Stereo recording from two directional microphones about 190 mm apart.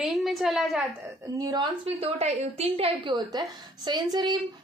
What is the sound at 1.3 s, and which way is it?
Speech, 20° right (ahead or behind).